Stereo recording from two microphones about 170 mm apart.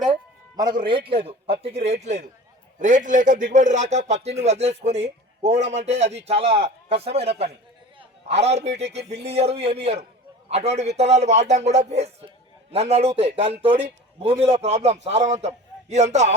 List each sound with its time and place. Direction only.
0.1 s a man's voice: 25° right (ahead or behind); by 16.3 s 40° right (ahead or behind)